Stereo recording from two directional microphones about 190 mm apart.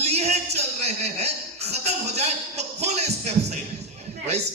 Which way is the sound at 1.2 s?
35° right (ahead or behind).